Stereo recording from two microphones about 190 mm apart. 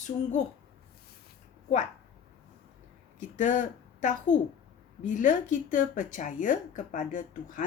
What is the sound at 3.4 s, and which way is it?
A woman's voice, 40° left (ahead or behind).